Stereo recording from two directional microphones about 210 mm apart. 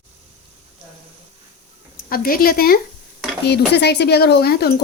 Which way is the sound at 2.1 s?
45° left (ahead or behind).